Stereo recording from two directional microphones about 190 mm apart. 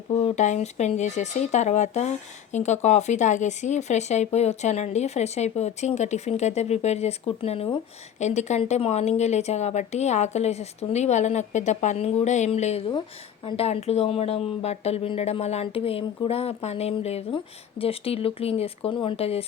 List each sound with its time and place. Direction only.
0.1 s speech: 35° left (ahead or behind)